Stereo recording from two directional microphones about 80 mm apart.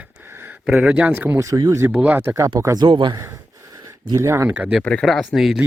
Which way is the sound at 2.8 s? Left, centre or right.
Right.